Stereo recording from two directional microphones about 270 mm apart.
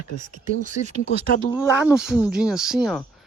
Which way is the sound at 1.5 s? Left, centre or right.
Centre.